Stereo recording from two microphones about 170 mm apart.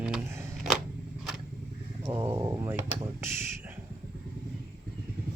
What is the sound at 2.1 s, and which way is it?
Speech, 20° right (ahead or behind).